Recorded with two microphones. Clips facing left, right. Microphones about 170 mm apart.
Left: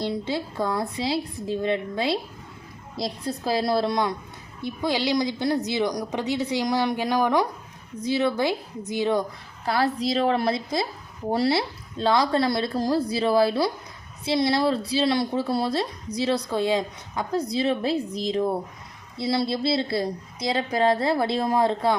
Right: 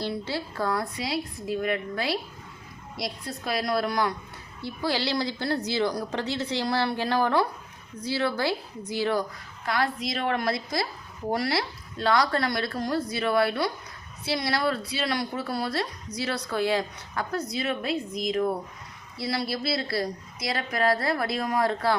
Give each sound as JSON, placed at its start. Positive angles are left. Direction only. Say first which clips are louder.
{"t": 0.0, "sound": "a woman's voice", "louder": "left 3 dB", "side_deg": 20}
{"t": 9.6, "sound": "a woman's voice", "louder": "left 4 dB", "side_deg": 30}